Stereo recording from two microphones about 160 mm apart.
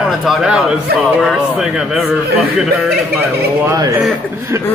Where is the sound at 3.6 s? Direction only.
20° right (ahead or behind).